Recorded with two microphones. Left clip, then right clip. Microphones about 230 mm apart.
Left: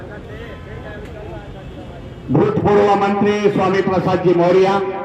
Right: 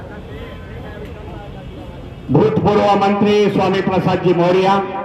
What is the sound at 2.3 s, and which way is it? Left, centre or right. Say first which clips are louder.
A man's voice: even; right.